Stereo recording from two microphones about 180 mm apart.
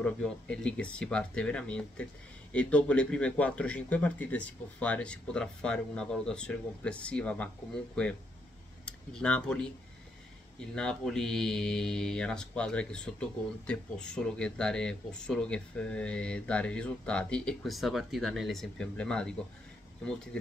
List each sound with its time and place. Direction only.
0.0 s speech: 5° left (ahead or behind)
10.7 s speech: 5° left (ahead or behind)